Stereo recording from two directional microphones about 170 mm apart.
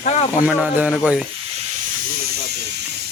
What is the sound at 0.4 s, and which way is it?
Speech, 5° right (ahead or behind).